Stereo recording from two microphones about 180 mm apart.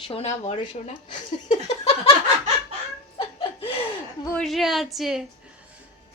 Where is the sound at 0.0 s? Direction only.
35° left (ahead or behind).